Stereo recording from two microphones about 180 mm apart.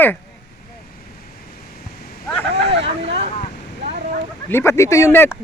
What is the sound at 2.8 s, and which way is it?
Boat, 35° right (ahead or behind).